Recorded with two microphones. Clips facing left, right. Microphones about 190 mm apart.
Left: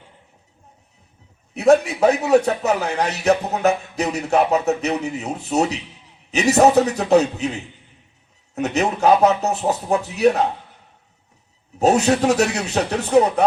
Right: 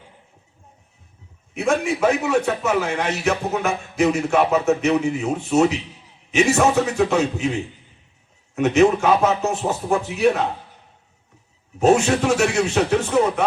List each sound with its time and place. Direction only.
1.5 s a man's voice: 40° left (ahead or behind)
8.5 s a man's voice: 40° left (ahead or behind)
11.8 s a man's voice: 40° left (ahead or behind)